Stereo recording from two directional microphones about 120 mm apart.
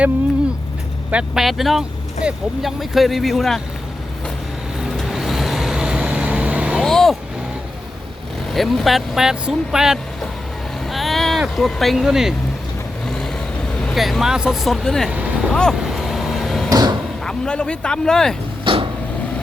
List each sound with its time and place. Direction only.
1.1 s speech: 5° right (ahead or behind)
4.8 s vehicle: centre (ahead or behind)
6.8 s vehicle: centre (ahead or behind)
8.5 s speech: centre (ahead or behind)
13.1 s vehicle: 5° left (ahead or behind)
13.8 s speech: centre (ahead or behind)
15.5 s vehicle: centre (ahead or behind)
16.6 s a sound: 35° right (ahead or behind)
17.2 s speech: 5° left (ahead or behind)
18.6 s a sound: 45° right (ahead or behind)